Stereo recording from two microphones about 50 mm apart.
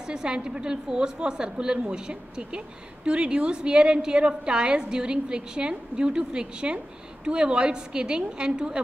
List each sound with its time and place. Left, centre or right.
0.0 s a woman's voice: centre